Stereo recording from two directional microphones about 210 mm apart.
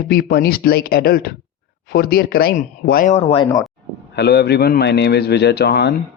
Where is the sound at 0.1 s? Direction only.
50° left (ahead or behind); by 3.4 s 30° left (ahead or behind).